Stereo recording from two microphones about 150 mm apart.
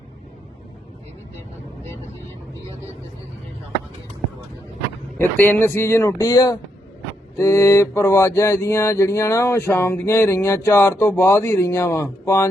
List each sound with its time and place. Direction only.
5.2 s mantra: 15° left (ahead or behind)